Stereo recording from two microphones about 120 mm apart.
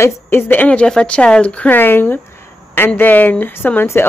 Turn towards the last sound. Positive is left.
turn(degrees=20)  # may be behind; listen again after turning